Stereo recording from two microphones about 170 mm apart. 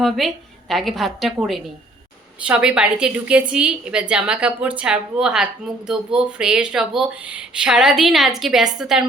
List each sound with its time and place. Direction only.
0.0 s speech: centre (ahead or behind)